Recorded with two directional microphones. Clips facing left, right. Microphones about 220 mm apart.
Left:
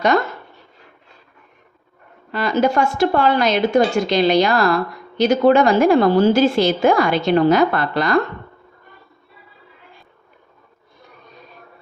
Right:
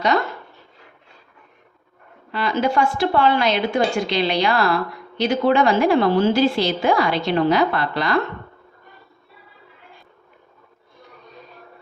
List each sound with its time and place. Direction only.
2.3 s a woman's voice: 45° left (ahead or behind)